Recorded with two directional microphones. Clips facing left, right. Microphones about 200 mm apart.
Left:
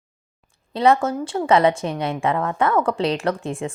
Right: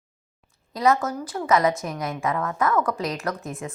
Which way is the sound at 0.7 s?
30° left (ahead or behind).